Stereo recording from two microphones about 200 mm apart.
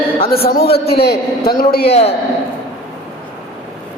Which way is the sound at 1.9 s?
30° left (ahead or behind).